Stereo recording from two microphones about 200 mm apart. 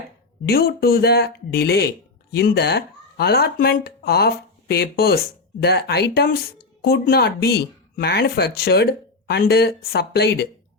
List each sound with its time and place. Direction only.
0.4 s speech: 50° left (ahead or behind)